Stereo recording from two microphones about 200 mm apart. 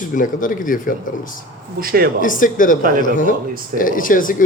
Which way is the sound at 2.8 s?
45° right (ahead or behind).